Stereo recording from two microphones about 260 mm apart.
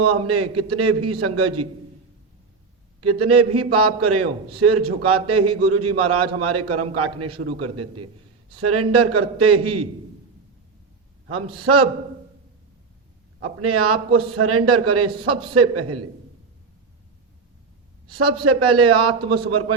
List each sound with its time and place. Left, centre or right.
0.0 s a man's voice: right
3.0 s a man's voice: right
11.4 s a man's voice: right
13.4 s a man's voice: right
18.1 s a man's voice: right